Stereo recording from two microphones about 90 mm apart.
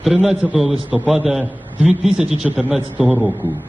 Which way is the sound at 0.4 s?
10° right (ahead or behind).